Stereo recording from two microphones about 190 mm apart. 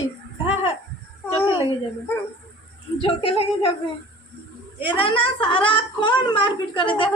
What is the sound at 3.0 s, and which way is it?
Speech, 30° left (ahead or behind).